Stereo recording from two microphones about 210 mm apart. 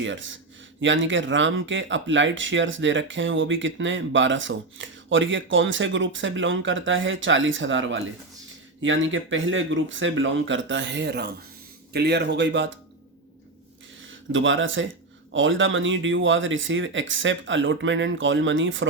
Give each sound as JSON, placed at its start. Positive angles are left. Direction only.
{"t": 0.0, "sound": "speech", "side_deg": -65}
{"t": 14.3, "sound": "speech", "side_deg": -65}